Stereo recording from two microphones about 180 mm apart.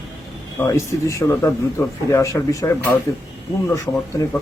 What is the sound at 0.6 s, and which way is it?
Speech, 15° left (ahead or behind).